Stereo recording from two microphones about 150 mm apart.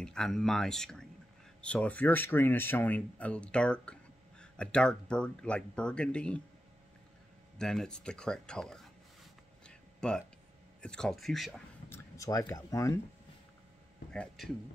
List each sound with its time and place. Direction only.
0.0 s speech: 5° left (ahead or behind)
7.5 s speech: 5° left (ahead or behind)
9.7 s a sound: 5° left (ahead or behind)
10.8 s speech: 5° left (ahead or behind)
11.9 s a sound: 20° left (ahead or behind)
12.4 s speech: 20° left (ahead or behind)
14.1 s speech: 5° left (ahead or behind)